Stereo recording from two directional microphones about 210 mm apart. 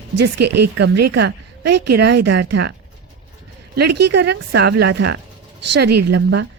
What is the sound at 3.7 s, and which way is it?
A woman's voice, 55° right (ahead or behind).